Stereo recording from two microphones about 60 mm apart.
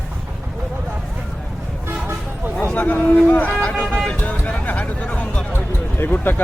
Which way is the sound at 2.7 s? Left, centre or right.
Left.